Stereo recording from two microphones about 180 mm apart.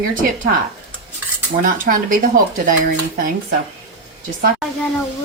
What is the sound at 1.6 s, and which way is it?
Speech, 50° right (ahead or behind).